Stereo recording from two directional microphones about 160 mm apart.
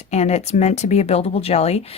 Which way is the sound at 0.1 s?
45° left (ahead or behind).